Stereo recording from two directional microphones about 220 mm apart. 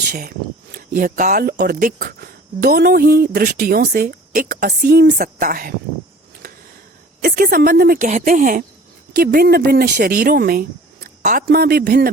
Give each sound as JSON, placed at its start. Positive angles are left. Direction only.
{"t": 0.1, "sound": "speech", "side_deg": -40}
{"t": 7.2, "sound": "speech", "side_deg": -45}